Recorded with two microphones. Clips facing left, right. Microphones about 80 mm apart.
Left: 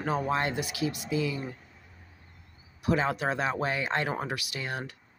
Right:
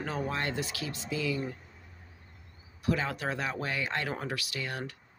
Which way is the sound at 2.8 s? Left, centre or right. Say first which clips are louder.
Left 4 dB; left.